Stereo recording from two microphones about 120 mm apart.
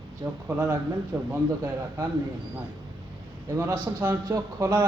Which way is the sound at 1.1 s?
25° right (ahead or behind).